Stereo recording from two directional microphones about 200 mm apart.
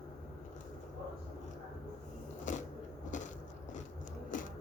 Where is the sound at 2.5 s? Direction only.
40° left (ahead or behind).